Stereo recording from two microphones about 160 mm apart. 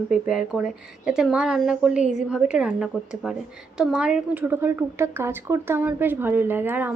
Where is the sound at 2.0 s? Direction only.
45° left (ahead or behind).